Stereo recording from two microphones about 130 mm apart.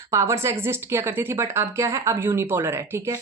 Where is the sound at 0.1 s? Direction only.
25° right (ahead or behind).